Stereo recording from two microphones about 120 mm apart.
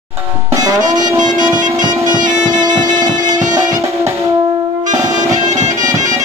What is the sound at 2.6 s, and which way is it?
Music, 35° right (ahead or behind).